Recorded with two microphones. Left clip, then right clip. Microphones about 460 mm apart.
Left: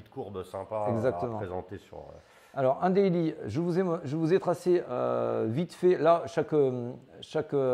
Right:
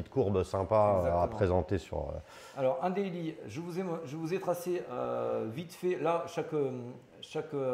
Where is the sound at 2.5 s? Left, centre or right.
Left.